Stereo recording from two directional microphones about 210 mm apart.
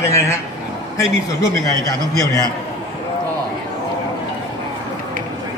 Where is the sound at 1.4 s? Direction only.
15° left (ahead or behind).